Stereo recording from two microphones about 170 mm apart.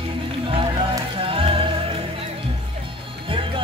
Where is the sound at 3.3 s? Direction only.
30° right (ahead or behind).